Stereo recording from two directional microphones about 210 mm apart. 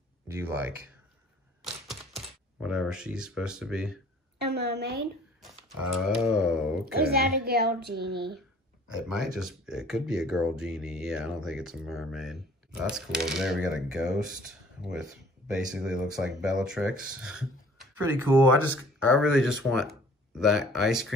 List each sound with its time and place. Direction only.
0.3 s speech: 10° right (ahead or behind)
1.6 s typing: centre (ahead or behind)
4.5 s a child's voice: 50° right (ahead or behind)
5.4 s speech: centre (ahead or behind)
6.9 s a child's voice: 45° right (ahead or behind)
8.8 s speech: 5° right (ahead or behind)